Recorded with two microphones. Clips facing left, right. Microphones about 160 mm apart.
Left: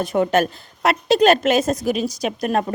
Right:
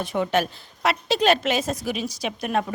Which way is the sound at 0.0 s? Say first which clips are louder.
Left 5 dB; 45° left (ahead or behind).